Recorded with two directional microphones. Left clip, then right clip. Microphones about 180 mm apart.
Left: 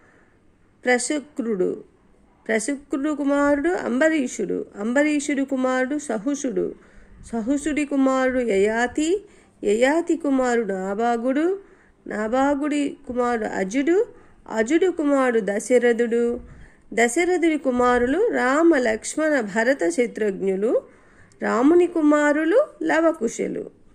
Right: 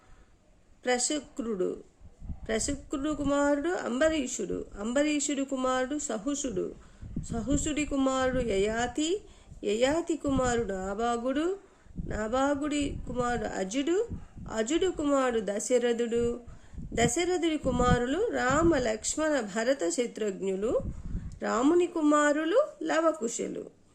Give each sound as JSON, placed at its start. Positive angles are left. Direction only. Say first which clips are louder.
{"t": 0.8, "sound": "speech", "louder": "left 8 dB", "side_deg": 15}